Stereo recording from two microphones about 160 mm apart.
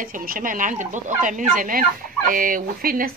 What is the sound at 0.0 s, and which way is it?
Speech, 60° right (ahead or behind).